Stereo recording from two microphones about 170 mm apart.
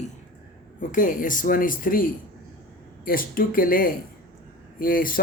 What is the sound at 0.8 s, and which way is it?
Speech, 50° left (ahead or behind).